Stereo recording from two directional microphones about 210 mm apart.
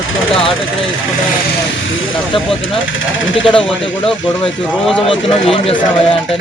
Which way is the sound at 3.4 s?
5° left (ahead or behind).